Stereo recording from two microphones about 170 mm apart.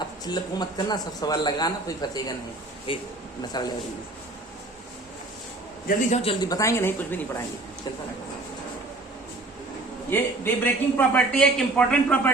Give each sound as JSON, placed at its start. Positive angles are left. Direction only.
{"t": 0.3, "sound": "speech", "side_deg": 25}
{"t": 6.1, "sound": "speech", "side_deg": 40}
{"t": 6.4, "sound": "a man's voice", "side_deg": 20}
{"t": 10.1, "sound": "a man's voice", "side_deg": 10}